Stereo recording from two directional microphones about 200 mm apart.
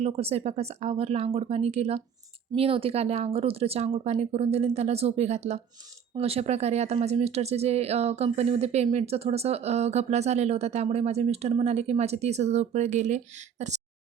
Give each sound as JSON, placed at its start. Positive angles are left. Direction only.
{"t": 0.0, "sound": "speech", "side_deg": -30}